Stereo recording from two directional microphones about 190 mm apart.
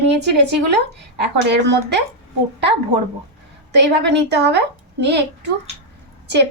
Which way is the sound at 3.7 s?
65° right (ahead or behind).